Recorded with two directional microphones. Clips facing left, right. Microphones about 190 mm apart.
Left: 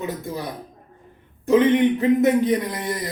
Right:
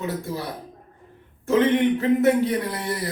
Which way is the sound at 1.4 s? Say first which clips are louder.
Left 3 dB; 15° left (ahead or behind).